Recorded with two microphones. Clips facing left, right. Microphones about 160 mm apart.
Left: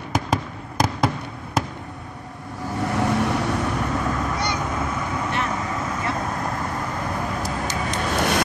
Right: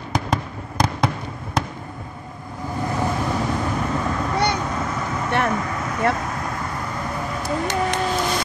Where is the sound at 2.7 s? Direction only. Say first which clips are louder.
Left 1 dB; 75° left (ahead or behind).